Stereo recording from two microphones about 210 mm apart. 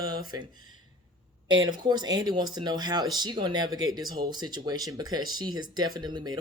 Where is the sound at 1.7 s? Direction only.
20° right (ahead or behind).